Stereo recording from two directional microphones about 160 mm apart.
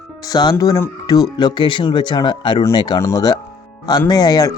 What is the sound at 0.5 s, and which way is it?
Speech, 20° left (ahead or behind).